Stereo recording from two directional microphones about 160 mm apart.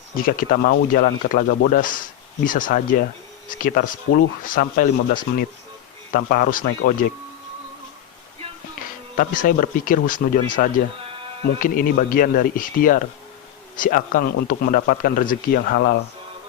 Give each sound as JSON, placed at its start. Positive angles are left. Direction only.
{"t": 0.2, "sound": "speech", "side_deg": 65}
{"t": 9.1, "sound": "speech", "side_deg": 55}
{"t": 11.4, "sound": "speech", "side_deg": 65}